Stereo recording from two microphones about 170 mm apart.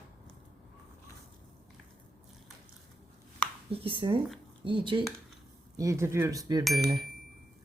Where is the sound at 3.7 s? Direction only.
30° right (ahead or behind).